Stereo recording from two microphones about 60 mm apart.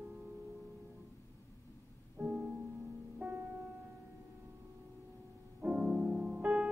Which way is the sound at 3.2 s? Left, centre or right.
Right.